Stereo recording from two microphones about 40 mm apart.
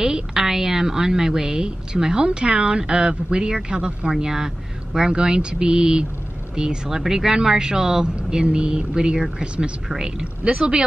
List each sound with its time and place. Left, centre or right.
0.0 s speech: centre
4.1 s speech: centre